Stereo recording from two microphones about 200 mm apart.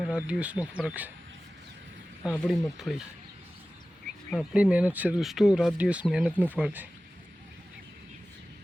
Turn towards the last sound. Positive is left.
turn(degrees=-10)  # may be behind; listen again after turning